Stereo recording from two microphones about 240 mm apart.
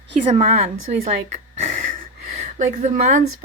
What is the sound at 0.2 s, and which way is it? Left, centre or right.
Speech, right.